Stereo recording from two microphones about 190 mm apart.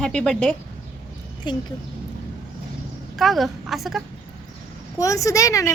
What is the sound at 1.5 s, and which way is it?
Speech, 25° left (ahead or behind).